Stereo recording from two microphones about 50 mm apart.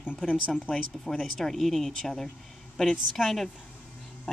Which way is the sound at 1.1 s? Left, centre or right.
Centre.